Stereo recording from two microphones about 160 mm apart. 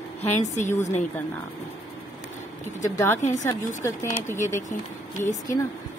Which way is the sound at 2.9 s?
15° left (ahead or behind).